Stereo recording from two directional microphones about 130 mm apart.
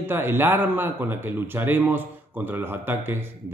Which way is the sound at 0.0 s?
15° right (ahead or behind).